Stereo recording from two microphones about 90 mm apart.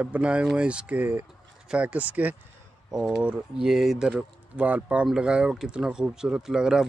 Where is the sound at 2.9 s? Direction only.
5° right (ahead or behind).